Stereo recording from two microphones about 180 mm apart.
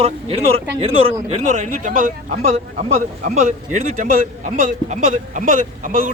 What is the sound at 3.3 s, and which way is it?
A man's voice, 45° right (ahead or behind).